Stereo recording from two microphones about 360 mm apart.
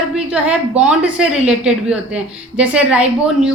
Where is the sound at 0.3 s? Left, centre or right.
Centre.